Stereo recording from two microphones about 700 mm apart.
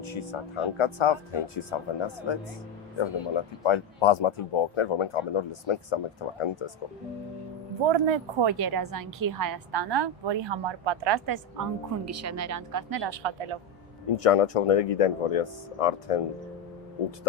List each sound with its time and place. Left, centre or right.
0.0 s speech: left
7.9 s a woman's voice: right
14.2 s speech: left